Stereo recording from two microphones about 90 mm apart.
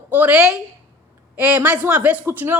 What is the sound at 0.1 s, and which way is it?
A woman's voice, 15° right (ahead or behind).